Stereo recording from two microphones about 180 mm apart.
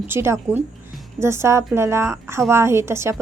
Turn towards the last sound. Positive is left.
turn(degrees=-15)  # may be behind; listen again after turning